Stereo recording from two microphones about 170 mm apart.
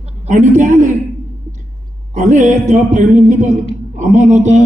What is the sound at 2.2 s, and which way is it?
A man's voice, 45° right (ahead or behind).